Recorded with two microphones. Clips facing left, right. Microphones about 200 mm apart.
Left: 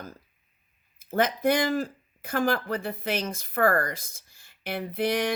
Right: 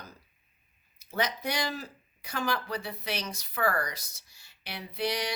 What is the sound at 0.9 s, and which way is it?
Speech, 50° left (ahead or behind).